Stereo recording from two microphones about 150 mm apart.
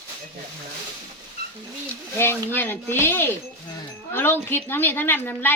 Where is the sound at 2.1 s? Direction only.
15° left (ahead or behind).